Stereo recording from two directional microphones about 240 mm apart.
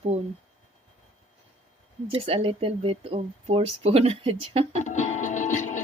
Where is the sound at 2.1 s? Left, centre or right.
Right.